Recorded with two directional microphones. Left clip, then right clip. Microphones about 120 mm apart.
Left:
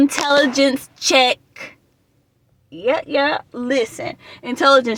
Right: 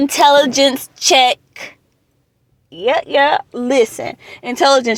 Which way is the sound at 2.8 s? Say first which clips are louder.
Right 4 dB; 30° right (ahead or behind).